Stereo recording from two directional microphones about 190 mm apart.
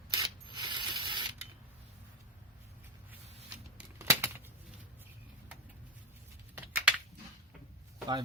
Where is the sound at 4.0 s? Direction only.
15° right (ahead or behind).